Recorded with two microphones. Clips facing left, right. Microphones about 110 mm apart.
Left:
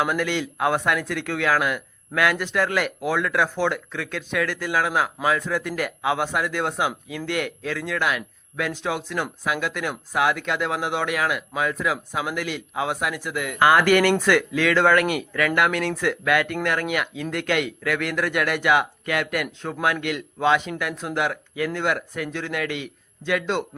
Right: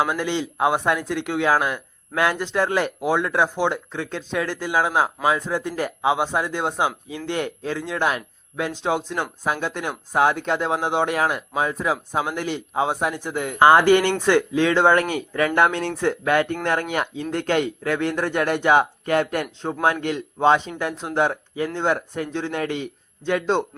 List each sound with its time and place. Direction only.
0.0 s speech: 25° right (ahead or behind)